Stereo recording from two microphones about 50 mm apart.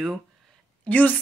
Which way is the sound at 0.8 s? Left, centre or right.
Left.